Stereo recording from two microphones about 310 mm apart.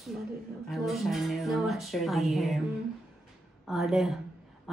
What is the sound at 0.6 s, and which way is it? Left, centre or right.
Speech, centre.